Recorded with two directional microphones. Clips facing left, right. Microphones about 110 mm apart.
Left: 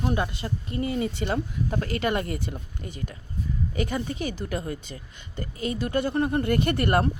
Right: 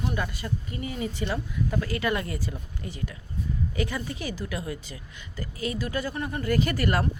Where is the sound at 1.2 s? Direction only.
35° left (ahead or behind).